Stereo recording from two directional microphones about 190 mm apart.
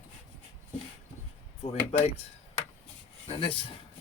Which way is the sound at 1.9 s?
35° left (ahead or behind).